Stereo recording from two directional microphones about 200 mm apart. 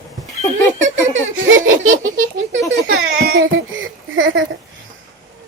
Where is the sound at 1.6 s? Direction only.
75° right (ahead or behind).